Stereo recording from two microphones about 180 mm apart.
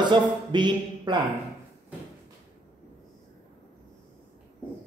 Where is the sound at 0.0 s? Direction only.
25° right (ahead or behind).